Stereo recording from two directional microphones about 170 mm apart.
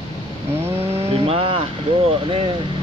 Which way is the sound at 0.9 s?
35° right (ahead or behind).